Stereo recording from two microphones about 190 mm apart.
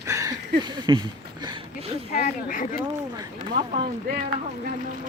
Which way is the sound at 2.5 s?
45° left (ahead or behind).